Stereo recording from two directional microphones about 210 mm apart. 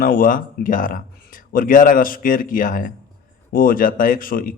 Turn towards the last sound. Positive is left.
turn(degrees=40)  # may be behind; listen again after turning